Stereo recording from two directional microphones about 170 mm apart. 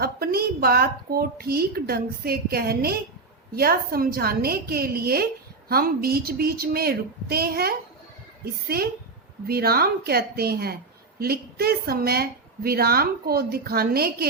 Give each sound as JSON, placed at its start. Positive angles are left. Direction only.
{"t": 0.0, "sound": "a woman's voice", "side_deg": -65}